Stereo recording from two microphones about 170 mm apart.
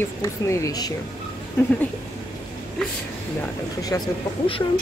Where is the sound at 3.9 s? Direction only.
15° left (ahead or behind).